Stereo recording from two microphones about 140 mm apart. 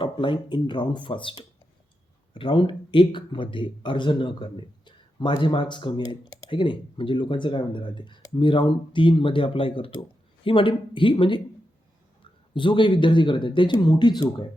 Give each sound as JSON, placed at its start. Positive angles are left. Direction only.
{"t": 0.0, "sound": "speech", "side_deg": 35}
{"t": 12.5, "sound": "speech", "side_deg": 35}